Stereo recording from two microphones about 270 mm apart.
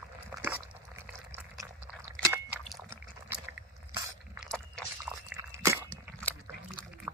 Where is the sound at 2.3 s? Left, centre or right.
Centre.